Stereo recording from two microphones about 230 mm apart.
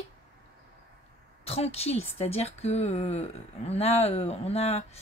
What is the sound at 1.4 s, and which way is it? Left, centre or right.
Speech, left.